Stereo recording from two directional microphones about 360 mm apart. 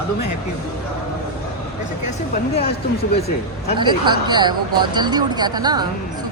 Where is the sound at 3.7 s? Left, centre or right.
Centre.